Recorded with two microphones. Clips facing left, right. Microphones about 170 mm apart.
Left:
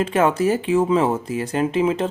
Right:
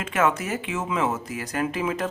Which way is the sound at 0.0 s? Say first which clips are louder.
Left 6 dB; 30° left (ahead or behind).